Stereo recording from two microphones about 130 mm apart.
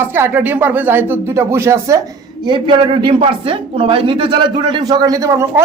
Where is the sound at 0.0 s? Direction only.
20° right (ahead or behind).